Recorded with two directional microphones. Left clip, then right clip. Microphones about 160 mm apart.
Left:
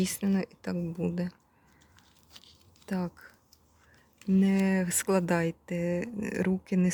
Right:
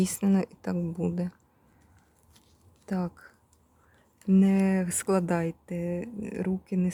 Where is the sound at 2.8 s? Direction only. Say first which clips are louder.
Right 2 dB; 10° right (ahead or behind).